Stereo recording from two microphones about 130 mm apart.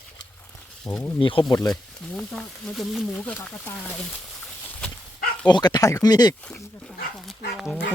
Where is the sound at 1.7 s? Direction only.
5° left (ahead or behind).